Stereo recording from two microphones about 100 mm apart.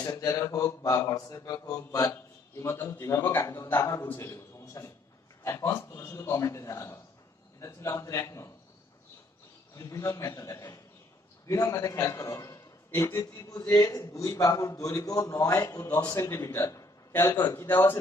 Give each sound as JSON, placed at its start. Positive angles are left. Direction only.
{"t": 0.0, "sound": "a man's voice", "side_deg": 35}
{"t": 9.8, "sound": "a man's voice", "side_deg": 30}